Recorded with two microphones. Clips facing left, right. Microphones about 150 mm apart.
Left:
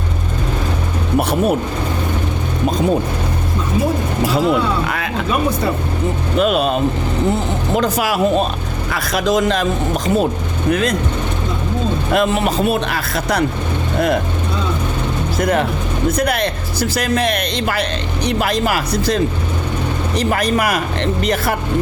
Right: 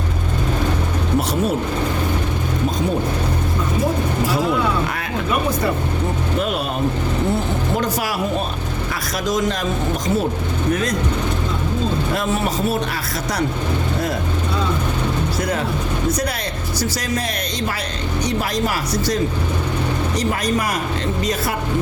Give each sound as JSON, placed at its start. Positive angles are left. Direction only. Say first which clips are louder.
{"t": 6.3, "sound": "speech", "louder": "left 9 dB", "side_deg": 90}
{"t": 7.8, "sound": "speech", "louder": "left 5 dB", "side_deg": 85}
{"t": 10.7, "sound": "speech", "louder": "left 4 dB", "side_deg": 80}
{"t": 12.1, "sound": "speech", "louder": "left 5 dB", "side_deg": 90}
{"t": 15.4, "sound": "speech", "louder": "left 5 dB", "side_deg": 55}
{"t": 18.3, "sound": "speech", "louder": "left 6 dB", "side_deg": 90}
{"t": 20.3, "sound": "speech", "louder": "left 4 dB", "side_deg": 65}